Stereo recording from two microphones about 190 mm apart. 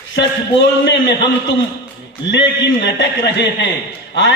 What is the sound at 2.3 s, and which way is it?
Speech, 65° left (ahead or behind).